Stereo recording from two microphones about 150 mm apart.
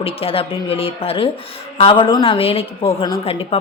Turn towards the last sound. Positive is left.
turn(degrees=40)  # may be behind; listen again after turning